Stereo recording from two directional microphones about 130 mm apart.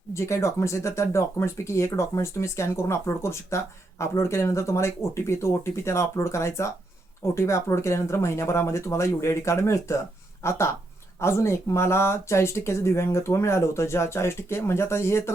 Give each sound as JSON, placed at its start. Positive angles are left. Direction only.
{"t": 0.1, "sound": "speech", "side_deg": 20}